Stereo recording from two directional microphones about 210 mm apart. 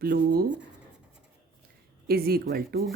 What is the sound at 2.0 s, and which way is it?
Speech, 45° right (ahead or behind).